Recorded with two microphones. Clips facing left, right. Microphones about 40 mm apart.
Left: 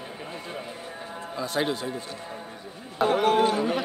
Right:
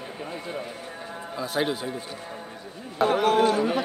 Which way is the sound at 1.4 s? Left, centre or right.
Centre.